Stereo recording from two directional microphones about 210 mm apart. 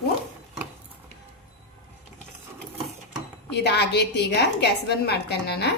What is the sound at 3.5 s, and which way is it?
A woman's voice, 50° left (ahead or behind).